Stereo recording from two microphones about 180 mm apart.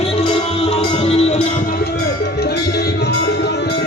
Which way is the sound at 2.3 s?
65° left (ahead or behind).